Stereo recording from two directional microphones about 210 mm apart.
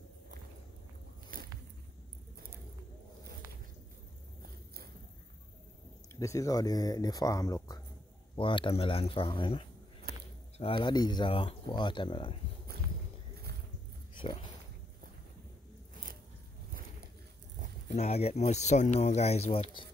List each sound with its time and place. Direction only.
6.1 s speech: 15° left (ahead or behind)
10.1 s a sound: 50° right (ahead or behind)
10.6 s speech: 20° left (ahead or behind)
17.9 s speech: 30° left (ahead or behind)